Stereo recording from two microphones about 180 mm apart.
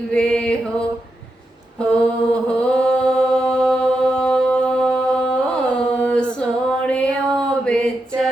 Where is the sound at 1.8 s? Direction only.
5° left (ahead or behind).